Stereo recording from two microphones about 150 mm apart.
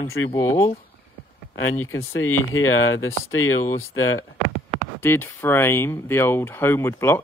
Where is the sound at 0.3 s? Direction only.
25° left (ahead or behind).